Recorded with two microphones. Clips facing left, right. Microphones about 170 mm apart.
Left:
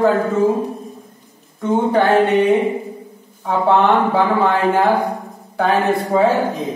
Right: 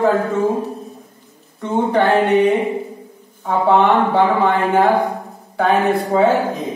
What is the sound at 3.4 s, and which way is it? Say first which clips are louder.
A man's voice: right 1 dB; centre (ahead or behind).